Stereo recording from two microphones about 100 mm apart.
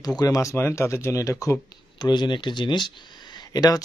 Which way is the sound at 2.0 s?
50° left (ahead or behind).